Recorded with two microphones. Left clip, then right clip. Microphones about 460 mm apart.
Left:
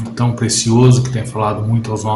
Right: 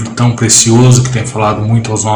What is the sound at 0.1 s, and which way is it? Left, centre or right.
Speech, left.